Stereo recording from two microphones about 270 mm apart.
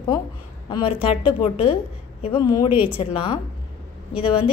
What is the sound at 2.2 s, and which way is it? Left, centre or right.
Speech, centre.